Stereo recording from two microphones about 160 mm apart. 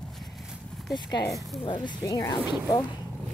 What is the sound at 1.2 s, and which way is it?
Speech, centre (ahead or behind).